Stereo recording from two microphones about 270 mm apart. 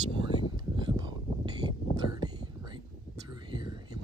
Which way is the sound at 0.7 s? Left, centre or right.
Centre.